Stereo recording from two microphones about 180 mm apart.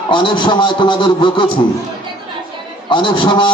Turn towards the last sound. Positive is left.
turn(degrees=25)  # may be behind; listen again after turning